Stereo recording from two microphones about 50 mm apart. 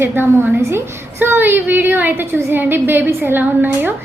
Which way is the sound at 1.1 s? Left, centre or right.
Right.